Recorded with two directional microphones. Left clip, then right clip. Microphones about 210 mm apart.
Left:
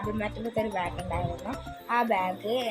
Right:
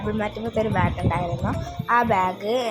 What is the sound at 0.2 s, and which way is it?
Speech, 10° right (ahead or behind).